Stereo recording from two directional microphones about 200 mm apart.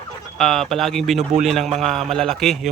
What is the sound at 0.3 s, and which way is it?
Speech, centre (ahead or behind).